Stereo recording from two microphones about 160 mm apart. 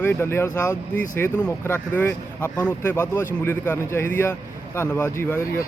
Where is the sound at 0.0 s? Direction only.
15° left (ahead or behind).